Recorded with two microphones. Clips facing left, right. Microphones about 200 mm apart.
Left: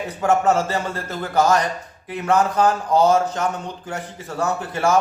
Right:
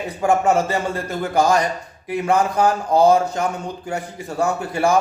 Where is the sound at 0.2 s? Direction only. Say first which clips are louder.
Right 1 dB; 10° right (ahead or behind).